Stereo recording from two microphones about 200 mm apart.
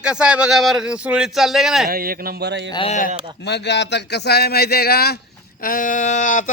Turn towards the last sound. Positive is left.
turn(degrees=40)  # may be behind; listen again after turning